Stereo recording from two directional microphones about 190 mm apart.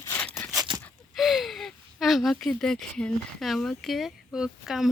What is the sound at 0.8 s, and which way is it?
Speech, centre (ahead or behind).